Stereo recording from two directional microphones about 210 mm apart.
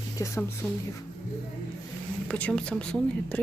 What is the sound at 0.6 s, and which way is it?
Speech, centre (ahead or behind).